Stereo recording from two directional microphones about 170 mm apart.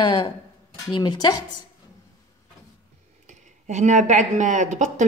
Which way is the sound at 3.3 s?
45° right (ahead or behind).